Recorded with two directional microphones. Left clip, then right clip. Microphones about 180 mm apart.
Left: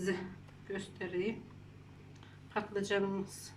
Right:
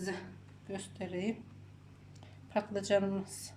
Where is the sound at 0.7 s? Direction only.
30° right (ahead or behind).